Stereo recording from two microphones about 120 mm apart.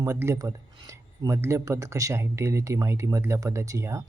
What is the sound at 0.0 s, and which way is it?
Speech, 25° right (ahead or behind).